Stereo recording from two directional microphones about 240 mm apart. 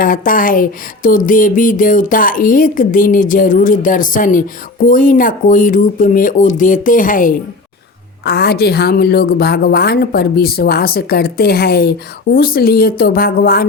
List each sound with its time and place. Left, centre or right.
0.0 s speech: left